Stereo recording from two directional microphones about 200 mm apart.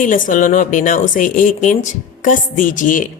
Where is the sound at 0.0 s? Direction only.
40° left (ahead or behind).